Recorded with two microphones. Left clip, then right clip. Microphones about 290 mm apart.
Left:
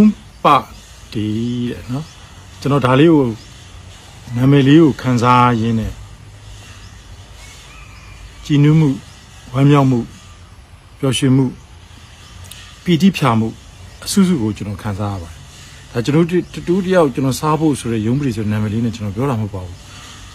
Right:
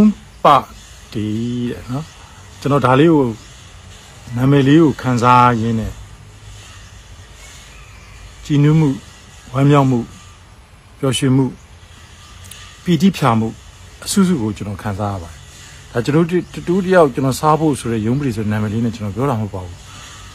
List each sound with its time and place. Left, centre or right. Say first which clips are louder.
0.0 s speech: right 1 dB; centre
4.4 s speech: left 1 dB; centre
8.5 s speech: left 1 dB; centre
12.8 s speech: even; centre